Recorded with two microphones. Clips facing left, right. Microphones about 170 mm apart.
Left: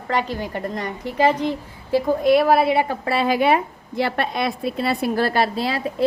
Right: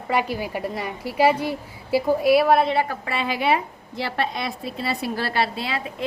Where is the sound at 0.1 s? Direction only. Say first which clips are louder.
Even; 10° right (ahead or behind).